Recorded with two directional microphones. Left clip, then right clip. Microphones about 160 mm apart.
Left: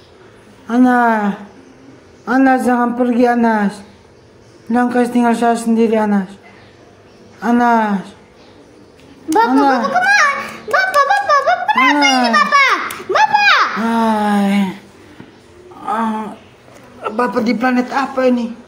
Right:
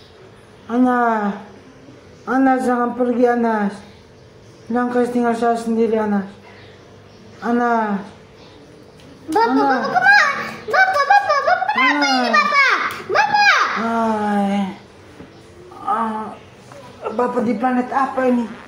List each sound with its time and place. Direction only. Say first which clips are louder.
0.7 s a man's voice: left 4 dB; 35° left (ahead or behind)
4.7 s a man's voice: left 3 dB; 35° left (ahead or behind)
7.4 s a man's voice: left 5 dB; 40° left (ahead or behind)
9.3 s a sound: left 4 dB; 55° left (ahead or behind)
13.9 s a man's voice: left 4 dB; 35° left (ahead or behind)
15.8 s a sound: left 2 dB; 50° left (ahead or behind)
17.2 s a man's voice: left 3 dB; 20° left (ahead or behind)